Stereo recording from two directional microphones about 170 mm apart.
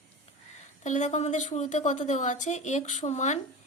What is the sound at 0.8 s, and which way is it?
A woman's voice, 45° left (ahead or behind).